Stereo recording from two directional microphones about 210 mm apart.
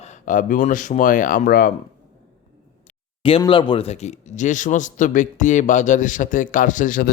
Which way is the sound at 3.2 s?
25° left (ahead or behind).